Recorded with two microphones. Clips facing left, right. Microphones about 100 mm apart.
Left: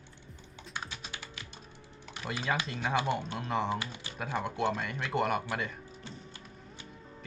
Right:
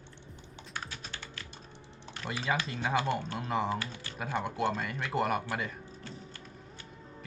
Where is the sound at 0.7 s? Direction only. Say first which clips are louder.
Even; 20° left (ahead or behind).